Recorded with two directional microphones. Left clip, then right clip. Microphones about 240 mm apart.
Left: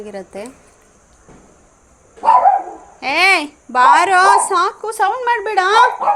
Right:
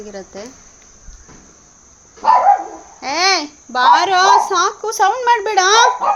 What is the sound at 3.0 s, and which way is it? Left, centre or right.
A child's voice, centre.